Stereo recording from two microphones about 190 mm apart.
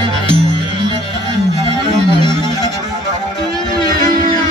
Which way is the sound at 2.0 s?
25° left (ahead or behind).